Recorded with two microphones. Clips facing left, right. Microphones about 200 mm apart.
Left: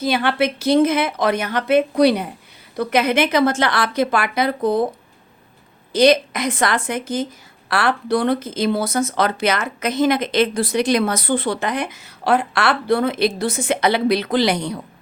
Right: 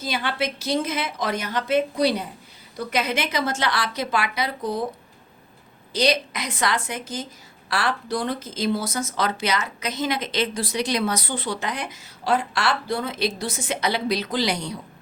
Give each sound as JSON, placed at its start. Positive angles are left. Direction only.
{"t": 0.0, "sound": "speech", "side_deg": 60}
{"t": 5.9, "sound": "a woman's voice", "side_deg": 50}